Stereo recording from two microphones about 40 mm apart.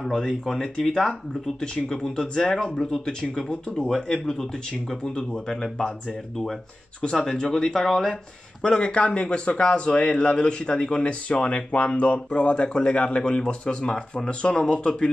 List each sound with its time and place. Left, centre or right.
0.5 s a man's voice: centre; by 3.9 s left
3.9 s speech: centre
7.0 s a man's voice: centre
8.7 s a man's voice: left